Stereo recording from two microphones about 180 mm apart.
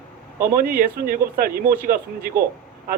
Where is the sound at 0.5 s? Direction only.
55° right (ahead or behind).